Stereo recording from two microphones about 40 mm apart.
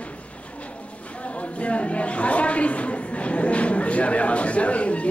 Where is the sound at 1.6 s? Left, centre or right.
Left.